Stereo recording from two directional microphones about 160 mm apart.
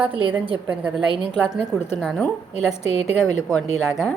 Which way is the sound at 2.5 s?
40° left (ahead or behind).